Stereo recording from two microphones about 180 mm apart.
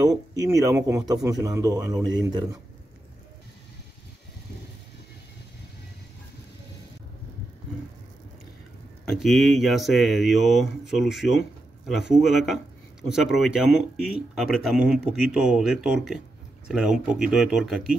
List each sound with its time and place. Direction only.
0.5 s speech: 15° right (ahead or behind)
9.0 s a man's voice: centre (ahead or behind)